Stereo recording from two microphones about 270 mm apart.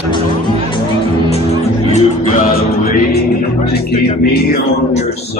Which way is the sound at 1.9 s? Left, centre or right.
Left.